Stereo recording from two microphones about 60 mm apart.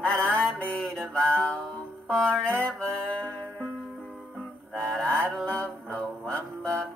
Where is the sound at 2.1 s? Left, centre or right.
Centre.